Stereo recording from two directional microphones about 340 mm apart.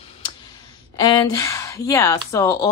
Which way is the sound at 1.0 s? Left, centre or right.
Centre.